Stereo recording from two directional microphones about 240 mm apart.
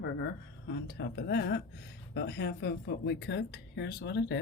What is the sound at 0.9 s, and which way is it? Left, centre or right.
Speech, left.